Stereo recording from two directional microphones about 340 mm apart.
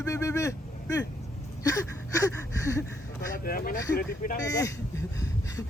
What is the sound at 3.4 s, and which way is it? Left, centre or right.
Speech, left.